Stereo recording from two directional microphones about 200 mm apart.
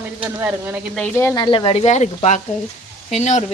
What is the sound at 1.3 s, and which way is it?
Speech, 25° left (ahead or behind).